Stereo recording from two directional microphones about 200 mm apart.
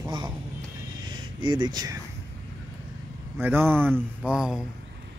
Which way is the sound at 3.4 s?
10° right (ahead or behind).